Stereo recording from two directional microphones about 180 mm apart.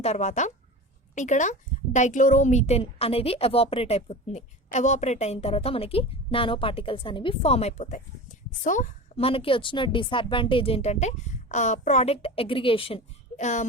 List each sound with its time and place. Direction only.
0.0 s a woman's voice: 40° left (ahead or behind)
9.1 s a woman's voice: 30° left (ahead or behind)